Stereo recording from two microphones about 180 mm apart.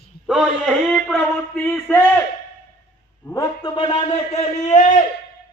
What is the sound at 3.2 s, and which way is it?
A man's voice, 20° left (ahead or behind).